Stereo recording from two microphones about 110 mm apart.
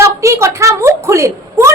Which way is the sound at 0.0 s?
25° right (ahead or behind).